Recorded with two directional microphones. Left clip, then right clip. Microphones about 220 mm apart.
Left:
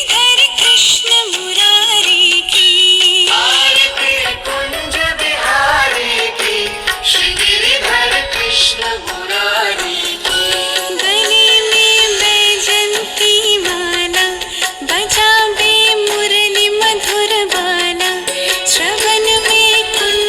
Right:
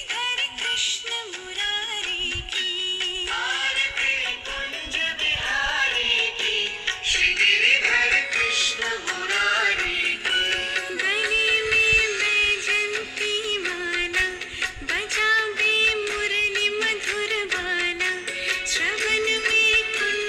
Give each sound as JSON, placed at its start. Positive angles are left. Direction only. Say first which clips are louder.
{"t": 0.1, "sound": "music", "louder": "left 16 dB", "side_deg": 45}
{"t": 7.2, "sound": "music", "louder": "left 6 dB", "side_deg": 25}
{"t": 10.2, "sound": "music", "louder": "left 8 dB", "side_deg": 30}
{"t": 14.9, "sound": "music", "louder": "left 11 dB", "side_deg": 30}